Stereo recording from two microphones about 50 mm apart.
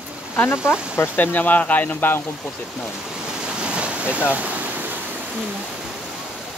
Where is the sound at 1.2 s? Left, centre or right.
Left.